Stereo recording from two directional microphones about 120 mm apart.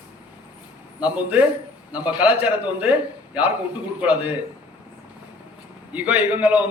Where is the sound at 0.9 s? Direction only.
10° right (ahead or behind).